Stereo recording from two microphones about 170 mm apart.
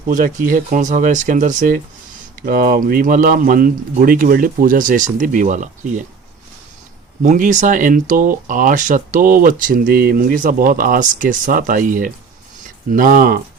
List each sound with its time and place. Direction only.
0.1 s speech: 50° right (ahead or behind)
7.2 s speech: 50° right (ahead or behind)